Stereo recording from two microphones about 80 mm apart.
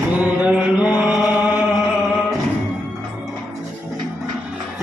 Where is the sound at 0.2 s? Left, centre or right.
Centre.